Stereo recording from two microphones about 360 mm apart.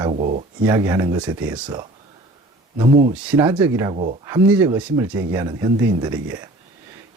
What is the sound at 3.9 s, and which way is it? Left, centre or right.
Speech, centre.